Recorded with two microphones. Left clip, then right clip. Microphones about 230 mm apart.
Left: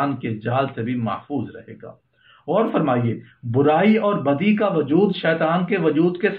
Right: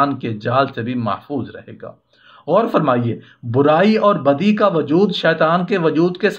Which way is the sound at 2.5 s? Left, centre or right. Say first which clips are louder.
Right 5 dB; right.